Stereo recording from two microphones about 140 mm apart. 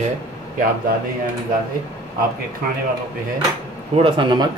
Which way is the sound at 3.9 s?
40° right (ahead or behind).